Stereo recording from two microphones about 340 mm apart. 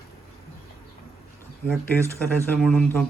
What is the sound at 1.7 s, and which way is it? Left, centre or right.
Speech, centre.